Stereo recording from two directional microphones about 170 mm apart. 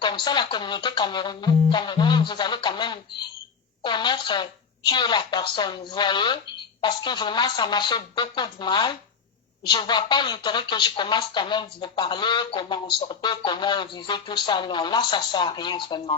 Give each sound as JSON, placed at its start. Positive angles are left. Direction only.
{"t": 0.0, "sound": "speech", "side_deg": 25}